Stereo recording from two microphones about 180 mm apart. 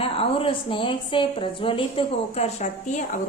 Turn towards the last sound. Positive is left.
turn(degrees=35)  # may be behind; listen again after turning